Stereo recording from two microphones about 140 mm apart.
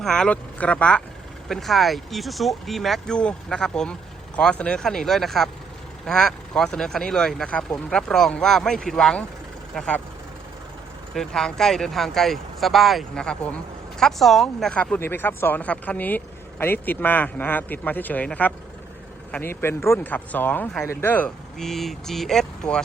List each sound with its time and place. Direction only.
0.0 s speech: 5° left (ahead or behind)
11.1 s speech: 5° left (ahead or behind)